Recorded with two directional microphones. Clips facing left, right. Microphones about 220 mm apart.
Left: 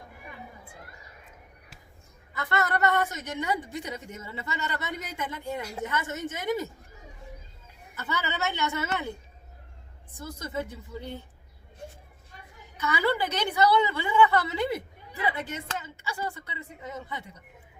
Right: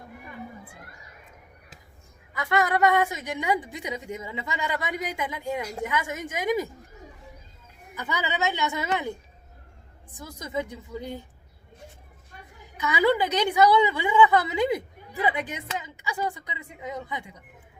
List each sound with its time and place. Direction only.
2.3 s a woman's voice: 10° right (ahead or behind)
7.9 s speech: 15° right (ahead or behind)
12.7 s speech: 15° right (ahead or behind)